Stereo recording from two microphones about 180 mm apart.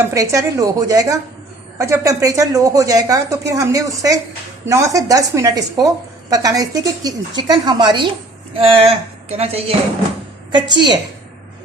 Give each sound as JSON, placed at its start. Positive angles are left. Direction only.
{"t": 0.1, "sound": "a woman's voice", "side_deg": -15}